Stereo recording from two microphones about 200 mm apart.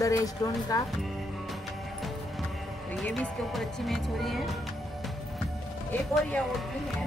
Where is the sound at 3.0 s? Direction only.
Centre (ahead or behind).